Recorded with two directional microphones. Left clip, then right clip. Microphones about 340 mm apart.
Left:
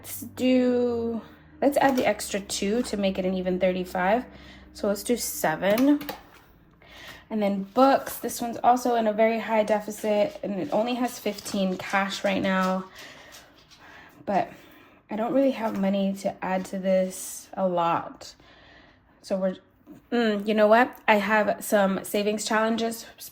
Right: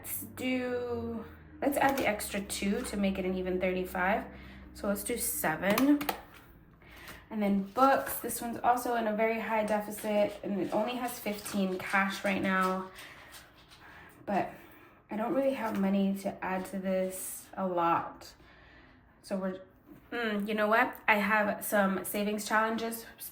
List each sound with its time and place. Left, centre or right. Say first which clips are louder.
0.0 s a woman's voice: left 10 dB; centre
7.3 s a woman's voice: left 6 dB; centre
15.1 s a woman's voice: left 6 dB; left
20.1 s a woman's voice: left 9 dB; centre